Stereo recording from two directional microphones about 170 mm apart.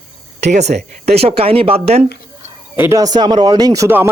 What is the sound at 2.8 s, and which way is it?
Speech, 15° right (ahead or behind).